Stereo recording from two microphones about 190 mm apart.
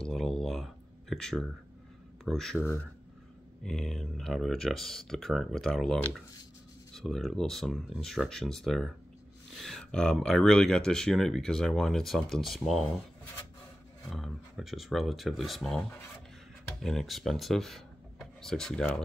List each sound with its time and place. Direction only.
0.0 s a sound: centre (ahead or behind)
2.2 s speech: centre (ahead or behind)
14.1 s speech: centre (ahead or behind)
16.8 s speech: centre (ahead or behind)